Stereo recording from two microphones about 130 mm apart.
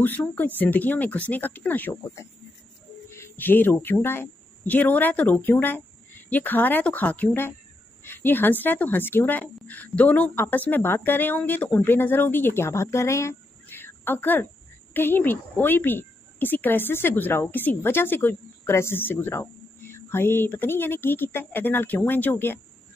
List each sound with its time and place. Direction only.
0.0 s a woman's voice: 15° left (ahead or behind)